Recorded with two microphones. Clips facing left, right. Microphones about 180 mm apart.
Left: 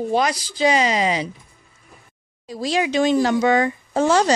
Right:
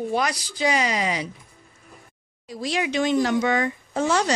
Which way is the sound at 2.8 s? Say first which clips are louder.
Left 4 dB; 35° left (ahead or behind).